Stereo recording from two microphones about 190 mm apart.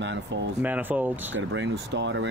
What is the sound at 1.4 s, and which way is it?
Speech, 70° right (ahead or behind).